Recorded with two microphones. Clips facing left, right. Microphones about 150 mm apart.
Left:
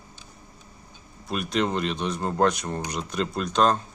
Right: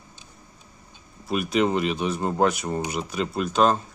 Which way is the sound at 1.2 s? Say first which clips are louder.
Right 3 dB; 5° right (ahead or behind).